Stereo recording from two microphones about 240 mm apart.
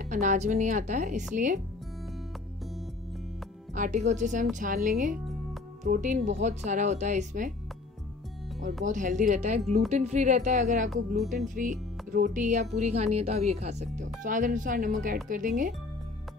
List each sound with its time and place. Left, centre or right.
0.0 s a woman's voice: right
3.7 s a woman's voice: right
8.8 s a woman's voice: right